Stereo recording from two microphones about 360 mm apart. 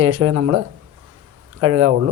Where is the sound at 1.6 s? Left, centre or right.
Right.